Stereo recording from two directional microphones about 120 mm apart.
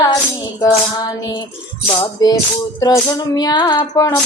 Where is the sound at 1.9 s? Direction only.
35° left (ahead or behind).